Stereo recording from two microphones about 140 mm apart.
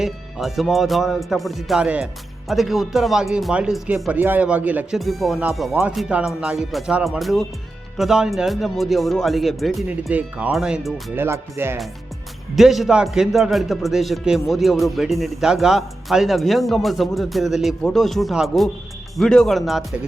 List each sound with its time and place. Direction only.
0.0 s a man's voice: centre (ahead or behind)
4.9 s a man's voice: centre (ahead or behind)
10.1 s speech: 10° right (ahead or behind)
11.1 s speech: 15° right (ahead or behind)
12.5 s a man's voice: centre (ahead or behind)